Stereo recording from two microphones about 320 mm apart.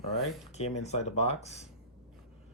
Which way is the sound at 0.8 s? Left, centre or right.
Centre.